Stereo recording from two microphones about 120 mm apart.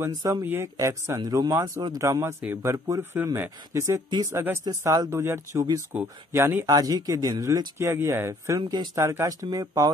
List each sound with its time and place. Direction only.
0.1 s speech: 30° right (ahead or behind)
8.5 s speech: 35° right (ahead or behind)
8.9 s speech: 25° right (ahead or behind)